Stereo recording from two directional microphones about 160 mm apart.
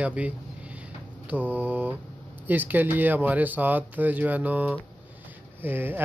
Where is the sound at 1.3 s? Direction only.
10° right (ahead or behind).